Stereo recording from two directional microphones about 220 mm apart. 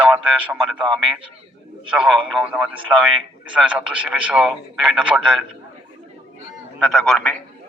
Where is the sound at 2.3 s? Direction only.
5° right (ahead or behind).